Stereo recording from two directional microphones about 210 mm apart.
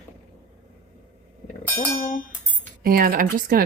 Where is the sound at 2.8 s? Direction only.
45° right (ahead or behind).